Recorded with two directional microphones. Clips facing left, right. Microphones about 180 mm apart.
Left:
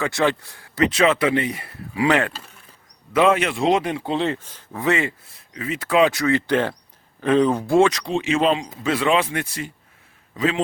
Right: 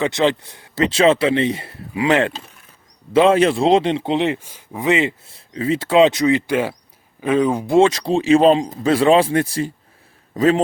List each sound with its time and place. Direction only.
0.0 s a man's voice: 20° right (ahead or behind)
7.8 s a man's voice: 30° right (ahead or behind)